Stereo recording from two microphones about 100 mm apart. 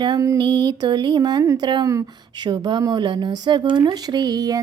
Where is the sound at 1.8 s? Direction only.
35° right (ahead or behind).